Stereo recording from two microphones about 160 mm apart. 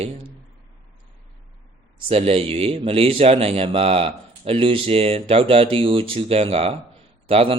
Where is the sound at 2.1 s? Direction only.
40° right (ahead or behind).